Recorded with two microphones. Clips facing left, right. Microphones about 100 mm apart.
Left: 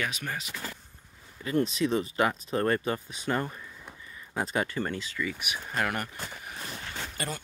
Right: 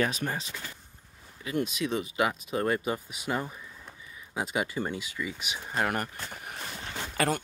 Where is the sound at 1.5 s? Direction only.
5° right (ahead or behind); by 6.4 s 35° right (ahead or behind).